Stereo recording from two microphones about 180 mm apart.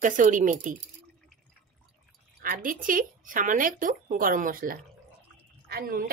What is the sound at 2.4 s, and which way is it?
A woman's voice, 50° right (ahead or behind).